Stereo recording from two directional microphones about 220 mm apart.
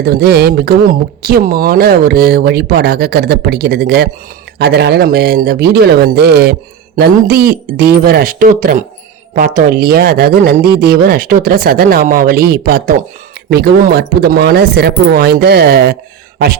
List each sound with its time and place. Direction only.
0.0 s speech: 45° right (ahead or behind)